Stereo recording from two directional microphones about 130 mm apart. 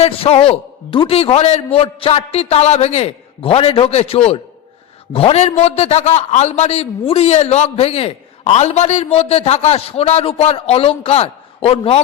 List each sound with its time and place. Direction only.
0.0 s a man's voice: 50° left (ahead or behind)